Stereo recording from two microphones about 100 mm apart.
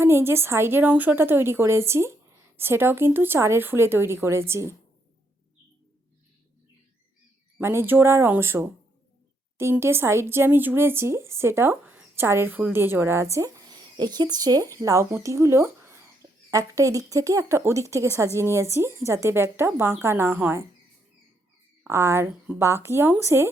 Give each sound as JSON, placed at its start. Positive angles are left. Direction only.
{"t": 0.0, "sound": "speech", "side_deg": -25}
{"t": 7.6, "sound": "speech", "side_deg": -25}
{"t": 21.8, "sound": "speech", "side_deg": -25}